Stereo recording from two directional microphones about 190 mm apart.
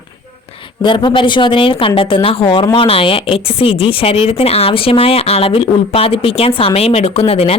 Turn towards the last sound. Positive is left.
turn(degrees=30)  # may be behind; listen again after turning